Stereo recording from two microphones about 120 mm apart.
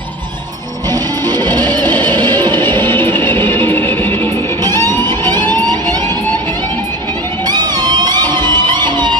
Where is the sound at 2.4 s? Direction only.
20° left (ahead or behind).